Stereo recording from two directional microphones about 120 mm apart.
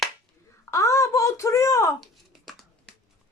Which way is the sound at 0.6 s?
25° left (ahead or behind).